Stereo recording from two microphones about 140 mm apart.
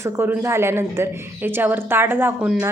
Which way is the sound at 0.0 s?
20° right (ahead or behind).